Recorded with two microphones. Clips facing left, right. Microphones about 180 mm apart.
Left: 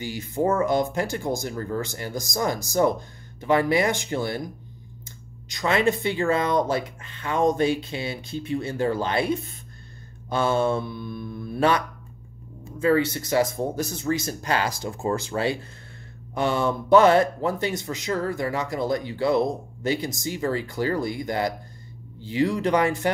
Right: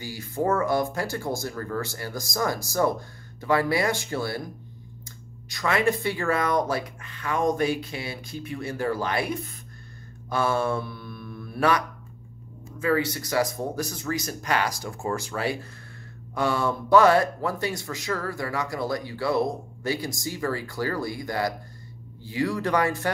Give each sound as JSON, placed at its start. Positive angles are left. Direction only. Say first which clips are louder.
{"t": 0.0, "sound": "a man's voice", "louder": "left 2 dB", "side_deg": 20}
{"t": 5.5, "sound": "a man's voice", "louder": "left 2 dB", "side_deg": 25}
{"t": 12.8, "sound": "a man's voice", "louder": "left 4 dB", "side_deg": 25}